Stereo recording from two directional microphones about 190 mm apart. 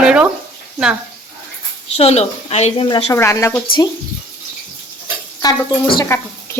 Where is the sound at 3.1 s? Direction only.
15° left (ahead or behind).